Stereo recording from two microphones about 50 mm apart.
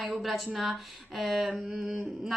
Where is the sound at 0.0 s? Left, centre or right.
Centre.